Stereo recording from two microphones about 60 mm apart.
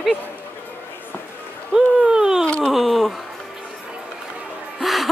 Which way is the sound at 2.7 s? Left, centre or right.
Centre.